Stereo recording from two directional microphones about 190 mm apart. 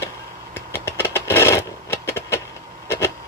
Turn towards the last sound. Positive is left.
turn(degrees=15)  # may be behind; listen again after turning